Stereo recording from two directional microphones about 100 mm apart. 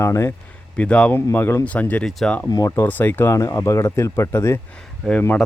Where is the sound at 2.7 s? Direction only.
20° left (ahead or behind).